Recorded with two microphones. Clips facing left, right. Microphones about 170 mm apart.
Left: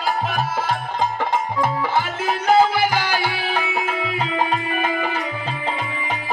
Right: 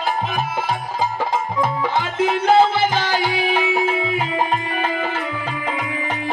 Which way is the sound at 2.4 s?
25° right (ahead or behind).